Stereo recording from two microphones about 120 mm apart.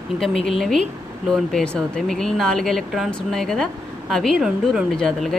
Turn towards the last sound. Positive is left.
turn(degrees=5)  # may be behind; listen again after turning